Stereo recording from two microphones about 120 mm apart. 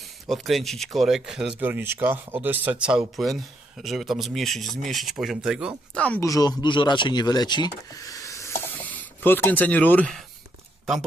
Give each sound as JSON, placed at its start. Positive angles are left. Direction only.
{"t": 0.0, "sound": "speech", "side_deg": 0}
{"t": 1.5, "sound": "speech", "side_deg": -15}
{"t": 5.9, "sound": "speech", "side_deg": 10}
{"t": 6.2, "sound": "speech", "side_deg": 30}